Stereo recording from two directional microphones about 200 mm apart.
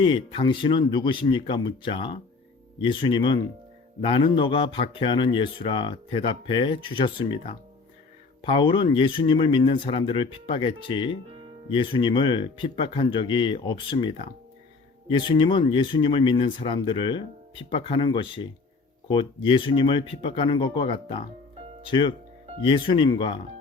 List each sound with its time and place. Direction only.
0.0 s speech: 25° left (ahead or behind)
15.1 s speech: 25° left (ahead or behind)